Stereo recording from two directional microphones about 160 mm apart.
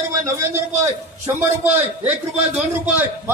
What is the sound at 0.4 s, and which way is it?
A man's voice, 15° right (ahead or behind).